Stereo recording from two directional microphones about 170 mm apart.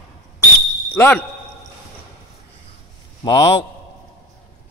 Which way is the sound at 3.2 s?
25° left (ahead or behind).